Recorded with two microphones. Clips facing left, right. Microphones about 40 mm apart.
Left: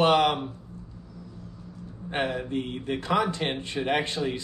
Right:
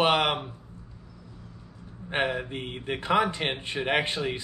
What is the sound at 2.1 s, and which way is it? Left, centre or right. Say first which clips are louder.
Speech: even; right.